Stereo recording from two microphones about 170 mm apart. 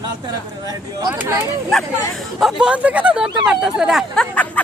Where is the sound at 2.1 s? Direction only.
Centre (ahead or behind).